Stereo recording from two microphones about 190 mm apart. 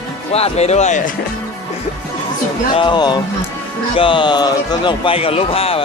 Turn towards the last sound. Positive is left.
turn(degrees=30)  # may be behind; listen again after turning